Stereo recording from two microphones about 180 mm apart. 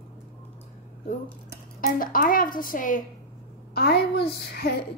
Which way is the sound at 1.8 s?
50° left (ahead or behind).